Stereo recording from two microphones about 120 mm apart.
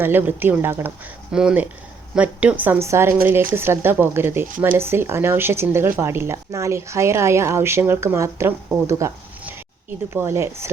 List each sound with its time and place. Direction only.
0.0 s speech: 20° right (ahead or behind)